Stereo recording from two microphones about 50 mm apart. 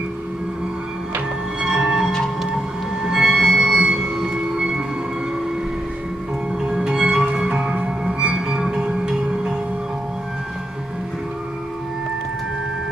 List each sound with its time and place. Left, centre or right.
1.6 s music: centre
6.6 s music: centre